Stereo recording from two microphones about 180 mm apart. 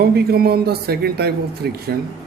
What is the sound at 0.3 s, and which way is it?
Speech, 60° right (ahead or behind).